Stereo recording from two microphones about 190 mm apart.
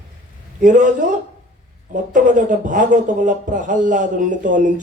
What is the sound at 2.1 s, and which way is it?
Speech, 40° right (ahead or behind).